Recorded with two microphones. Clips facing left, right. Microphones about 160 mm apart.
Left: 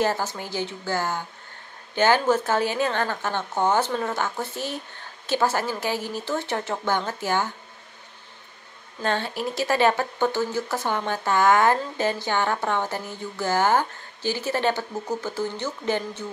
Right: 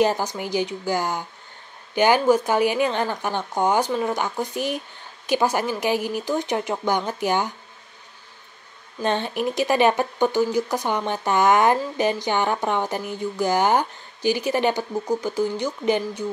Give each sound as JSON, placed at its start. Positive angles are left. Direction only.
{"t": 0.0, "sound": "speech", "side_deg": -15}
{"t": 9.0, "sound": "speech", "side_deg": -20}